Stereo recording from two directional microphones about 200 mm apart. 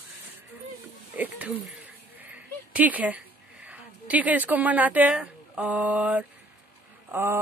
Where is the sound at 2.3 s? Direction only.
10° right (ahead or behind).